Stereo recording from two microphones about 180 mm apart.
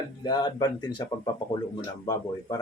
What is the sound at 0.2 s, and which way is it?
Speech, 20° left (ahead or behind).